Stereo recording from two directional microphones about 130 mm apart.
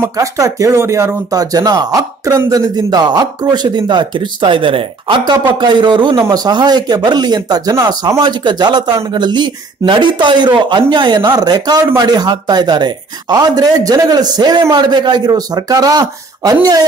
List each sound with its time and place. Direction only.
0.0 s speech: 25° right (ahead or behind)